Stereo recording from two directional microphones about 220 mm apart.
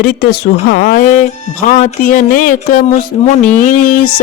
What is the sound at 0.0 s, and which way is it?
Speech, 45° left (ahead or behind).